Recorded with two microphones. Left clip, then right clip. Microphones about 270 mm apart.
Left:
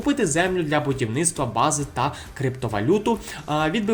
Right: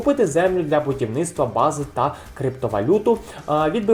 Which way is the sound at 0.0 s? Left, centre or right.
Left.